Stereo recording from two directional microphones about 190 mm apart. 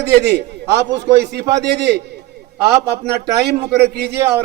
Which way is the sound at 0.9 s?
65° right (ahead or behind).